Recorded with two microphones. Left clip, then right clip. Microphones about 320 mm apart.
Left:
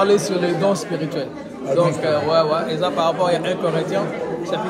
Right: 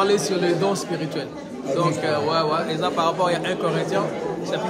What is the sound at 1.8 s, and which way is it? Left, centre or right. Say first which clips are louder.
A man's voice: left 4 dB; centre.